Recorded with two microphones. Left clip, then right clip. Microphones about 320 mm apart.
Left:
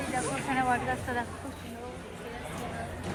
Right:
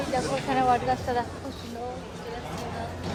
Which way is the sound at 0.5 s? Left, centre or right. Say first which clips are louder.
Right 6 dB; right.